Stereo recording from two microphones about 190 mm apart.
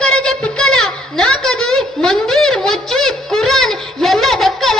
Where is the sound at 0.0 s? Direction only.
5° left (ahead or behind).